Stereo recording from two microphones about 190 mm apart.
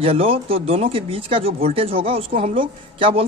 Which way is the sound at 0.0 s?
30° right (ahead or behind).